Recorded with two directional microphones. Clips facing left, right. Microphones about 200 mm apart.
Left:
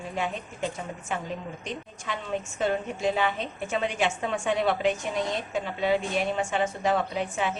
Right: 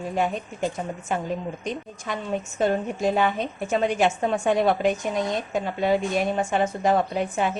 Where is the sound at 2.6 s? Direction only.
40° right (ahead or behind).